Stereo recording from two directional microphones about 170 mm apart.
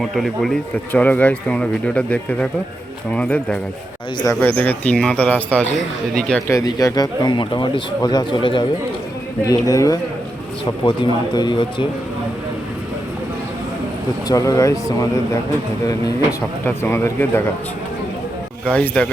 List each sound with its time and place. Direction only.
0.0 s speech: centre (ahead or behind)
6.5 s speech: 20° left (ahead or behind)
14.3 s speech: 20° left (ahead or behind)
16.6 s speech: 15° left (ahead or behind)
18.7 s speech: 10° left (ahead or behind)